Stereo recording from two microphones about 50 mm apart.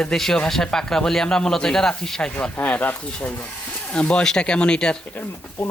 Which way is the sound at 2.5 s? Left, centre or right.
Left.